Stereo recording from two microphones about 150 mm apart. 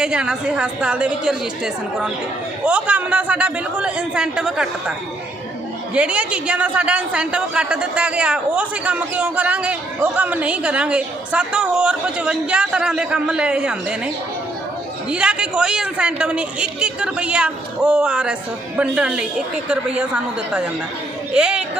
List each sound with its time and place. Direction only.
0.0 s a woman's voice: 5° right (ahead or behind)
15.1 s a man's voice: 5° right (ahead or behind)